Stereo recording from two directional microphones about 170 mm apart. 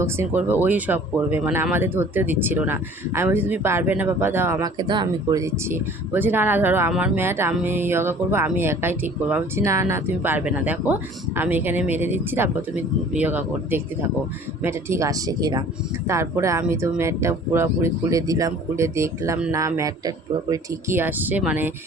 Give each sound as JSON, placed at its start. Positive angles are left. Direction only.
{"t": 0.0, "sound": "speech", "side_deg": -15}
{"t": 4.8, "sound": "speech", "side_deg": -25}